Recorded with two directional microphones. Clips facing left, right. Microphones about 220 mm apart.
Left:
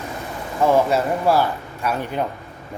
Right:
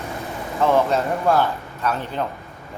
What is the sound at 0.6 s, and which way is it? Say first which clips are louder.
Speech: left 1 dB; 10° left (ahead or behind).